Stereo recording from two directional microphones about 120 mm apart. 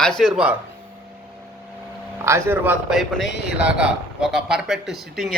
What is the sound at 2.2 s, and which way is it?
Speech, 20° right (ahead or behind).